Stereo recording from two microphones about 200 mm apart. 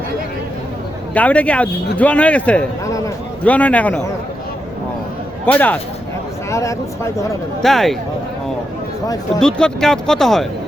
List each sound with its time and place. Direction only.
1.1 s speech: 5° left (ahead or behind)
5.5 s speech: 10° left (ahead or behind)
7.6 s speech: centre (ahead or behind)
9.4 s speech: 5° left (ahead or behind)